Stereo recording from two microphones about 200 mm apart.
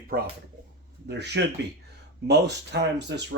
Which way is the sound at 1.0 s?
60° right (ahead or behind).